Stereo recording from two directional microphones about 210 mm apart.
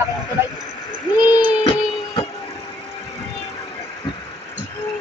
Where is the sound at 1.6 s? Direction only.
25° left (ahead or behind).